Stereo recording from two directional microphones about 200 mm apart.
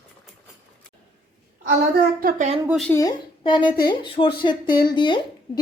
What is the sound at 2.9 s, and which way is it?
A woman's voice, 20° left (ahead or behind).